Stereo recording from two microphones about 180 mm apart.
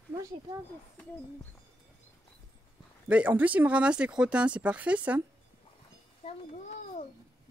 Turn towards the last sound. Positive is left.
turn(degrees=30)  # may be behind; listen again after turning